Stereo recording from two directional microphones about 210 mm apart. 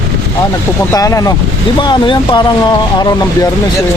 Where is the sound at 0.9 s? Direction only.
15° left (ahead or behind).